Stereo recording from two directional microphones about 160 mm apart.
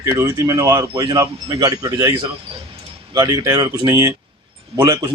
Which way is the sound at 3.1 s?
25° right (ahead or behind).